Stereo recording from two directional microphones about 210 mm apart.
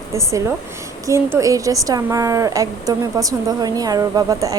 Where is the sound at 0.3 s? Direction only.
15° right (ahead or behind).